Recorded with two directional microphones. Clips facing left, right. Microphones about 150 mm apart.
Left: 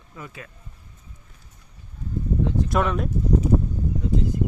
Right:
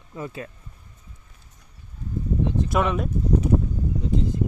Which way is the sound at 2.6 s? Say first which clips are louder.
Even; 5° right (ahead or behind).